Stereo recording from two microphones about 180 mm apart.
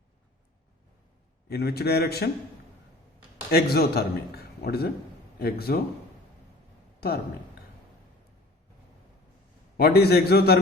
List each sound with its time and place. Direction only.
1.5 s a man's voice: 60° left (ahead or behind)
3.5 s a man's voice: 60° left (ahead or behind)
9.7 s a man's voice: 60° left (ahead or behind)